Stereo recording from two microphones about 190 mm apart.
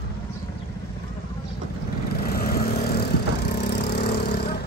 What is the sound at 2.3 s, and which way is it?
Lawn mower, 50° left (ahead or behind).